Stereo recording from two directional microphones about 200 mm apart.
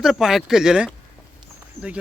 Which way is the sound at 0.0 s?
Centre (ahead or behind).